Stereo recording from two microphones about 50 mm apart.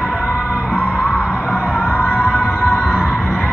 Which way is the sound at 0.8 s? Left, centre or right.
Left.